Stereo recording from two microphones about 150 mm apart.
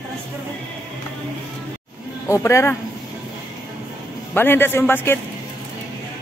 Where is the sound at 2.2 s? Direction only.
20° left (ahead or behind).